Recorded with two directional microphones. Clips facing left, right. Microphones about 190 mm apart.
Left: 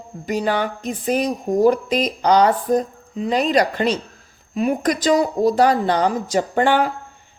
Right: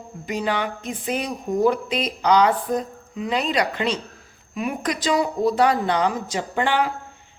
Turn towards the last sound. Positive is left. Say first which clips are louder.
# left 5 dB
turn(degrees=45)  # may be behind; listen again after turning